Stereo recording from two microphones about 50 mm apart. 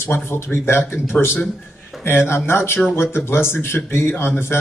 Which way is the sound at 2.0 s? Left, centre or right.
Left.